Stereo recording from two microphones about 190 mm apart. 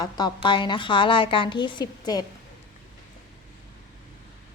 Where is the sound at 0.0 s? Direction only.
25° left (ahead or behind).